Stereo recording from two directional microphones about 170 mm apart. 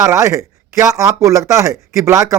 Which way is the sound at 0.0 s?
20° right (ahead or behind).